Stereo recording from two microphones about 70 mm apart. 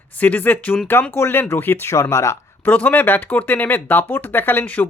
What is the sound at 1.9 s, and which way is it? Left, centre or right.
Speech, left.